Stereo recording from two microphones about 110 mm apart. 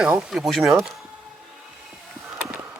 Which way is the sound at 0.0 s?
5° right (ahead or behind).